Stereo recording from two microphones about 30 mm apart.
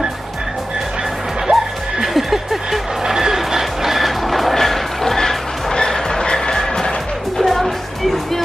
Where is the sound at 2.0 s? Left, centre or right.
Centre.